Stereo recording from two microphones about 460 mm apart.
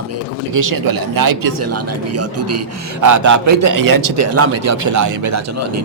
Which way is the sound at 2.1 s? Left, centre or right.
Right.